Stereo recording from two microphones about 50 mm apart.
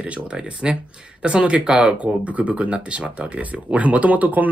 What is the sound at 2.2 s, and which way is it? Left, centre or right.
Speech, right.